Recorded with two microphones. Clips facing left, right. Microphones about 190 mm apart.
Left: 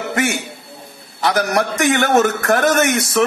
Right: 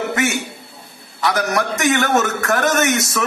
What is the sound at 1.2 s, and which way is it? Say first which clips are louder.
A man's voice: left 2 dB; 30° left (ahead or behind).